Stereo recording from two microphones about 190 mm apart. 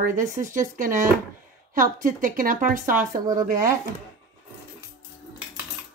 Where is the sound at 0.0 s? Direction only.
45° right (ahead or behind).